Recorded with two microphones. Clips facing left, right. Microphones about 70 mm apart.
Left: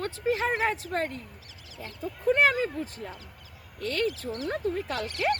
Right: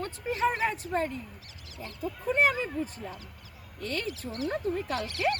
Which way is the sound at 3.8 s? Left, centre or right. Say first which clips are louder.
Left 3 dB; left.